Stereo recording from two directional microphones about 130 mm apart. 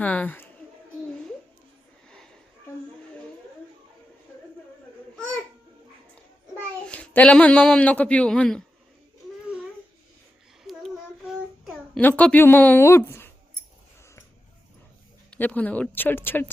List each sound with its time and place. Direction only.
0.0 s speech: 10° left (ahead or behind)
2.0 s a sound: 5° left (ahead or behind)
6.8 s speech: 10° left (ahead or behind)
10.6 s child singing: centre (ahead or behind)
11.9 s speech: 15° left (ahead or behind)
15.3 s speech: 10° left (ahead or behind)